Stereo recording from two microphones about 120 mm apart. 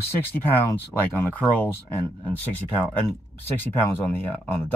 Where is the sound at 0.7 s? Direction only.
15° left (ahead or behind).